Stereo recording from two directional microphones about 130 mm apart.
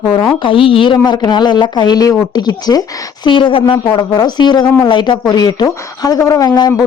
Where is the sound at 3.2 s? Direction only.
40° left (ahead or behind).